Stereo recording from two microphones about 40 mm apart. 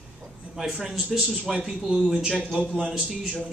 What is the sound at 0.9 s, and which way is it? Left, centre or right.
Speech, centre.